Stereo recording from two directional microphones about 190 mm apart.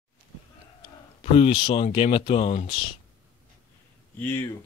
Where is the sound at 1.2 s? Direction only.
30° left (ahead or behind).